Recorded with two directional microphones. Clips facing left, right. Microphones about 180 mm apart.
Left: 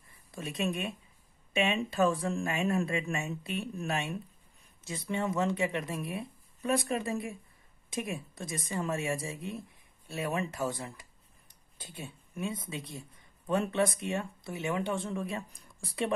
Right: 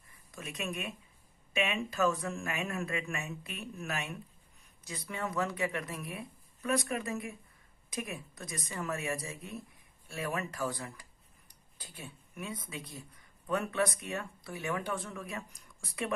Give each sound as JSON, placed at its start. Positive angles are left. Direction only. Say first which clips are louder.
{"t": 0.3, "sound": "speech", "louder": "left 6 dB", "side_deg": 30}